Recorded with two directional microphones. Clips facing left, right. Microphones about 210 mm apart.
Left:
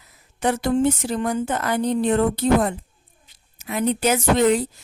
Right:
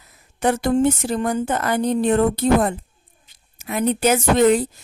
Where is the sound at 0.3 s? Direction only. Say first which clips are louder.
Right 2 dB; 50° right (ahead or behind).